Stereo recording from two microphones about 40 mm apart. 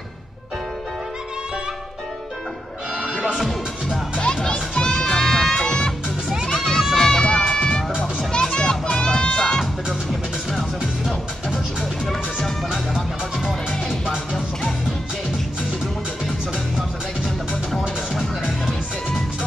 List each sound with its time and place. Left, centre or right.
3.0 s music: centre
4.2 s children playing: left
6.5 s crowd: centre
6.9 s music: centre
7.2 s music: left
13.5 s music: centre